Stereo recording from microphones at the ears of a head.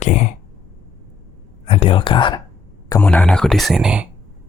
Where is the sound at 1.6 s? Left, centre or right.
Left.